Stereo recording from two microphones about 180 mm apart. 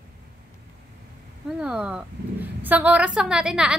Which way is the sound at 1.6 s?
5° right (ahead or behind).